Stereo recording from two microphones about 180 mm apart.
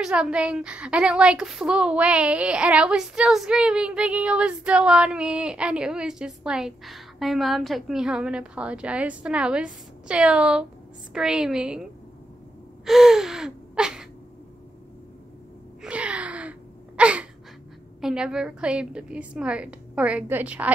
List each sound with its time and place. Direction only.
0.0 s a woman's voice: 5° right (ahead or behind)
12.8 s gasp: centre (ahead or behind)
15.8 s a sound: 5° right (ahead or behind)
18.0 s a woman's voice: 5° right (ahead or behind)